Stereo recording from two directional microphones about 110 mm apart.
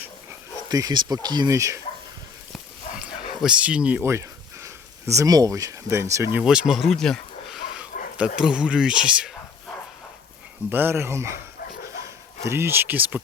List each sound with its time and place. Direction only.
0.7 s speech: 35° right (ahead or behind)
1.5 s speech: 25° right (ahead or behind)
2.9 s dog: 65° left (ahead or behind)
3.4 s speech: 10° right (ahead or behind)
4.0 s speech: 25° right (ahead or behind)
6.3 s speech: 10° right (ahead or behind)
7.8 s speech: 10° right (ahead or behind)
10.7 s speech: 20° right (ahead or behind)
12.5 s speech: 20° right (ahead or behind)